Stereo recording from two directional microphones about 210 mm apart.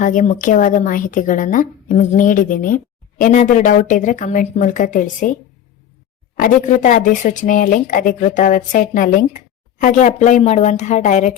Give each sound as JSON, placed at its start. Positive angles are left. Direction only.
{"t": 0.0, "sound": "a woman's voice", "side_deg": 40}
{"t": 6.4, "sound": "a woman's voice", "side_deg": 40}